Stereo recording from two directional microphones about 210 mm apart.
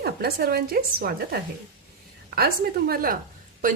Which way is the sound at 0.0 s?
45° right (ahead or behind).